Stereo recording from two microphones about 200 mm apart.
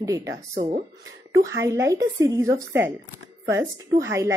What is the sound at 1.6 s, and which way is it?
A woman's voice, 15° right (ahead or behind).